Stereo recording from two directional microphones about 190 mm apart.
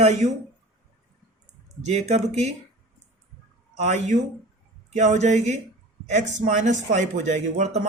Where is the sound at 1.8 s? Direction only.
35° right (ahead or behind).